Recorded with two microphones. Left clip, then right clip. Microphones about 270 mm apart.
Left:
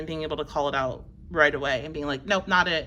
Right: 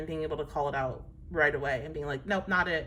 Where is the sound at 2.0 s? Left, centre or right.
Centre.